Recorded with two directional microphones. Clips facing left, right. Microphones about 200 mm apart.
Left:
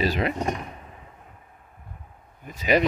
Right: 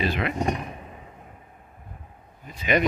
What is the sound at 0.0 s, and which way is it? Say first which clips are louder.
Speech: left 2 dB; 40° left (ahead or behind).